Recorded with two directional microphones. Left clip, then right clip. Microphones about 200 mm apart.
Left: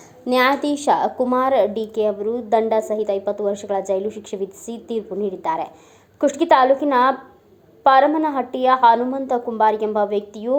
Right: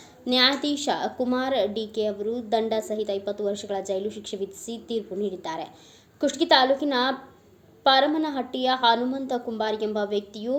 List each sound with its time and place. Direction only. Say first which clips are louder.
0.3 s a woman's voice: left 5 dB; 5° left (ahead or behind)
4.6 s a woman's voice: left 4 dB; 25° left (ahead or behind)
4.9 s a woman's voice: left 5 dB; centre (ahead or behind)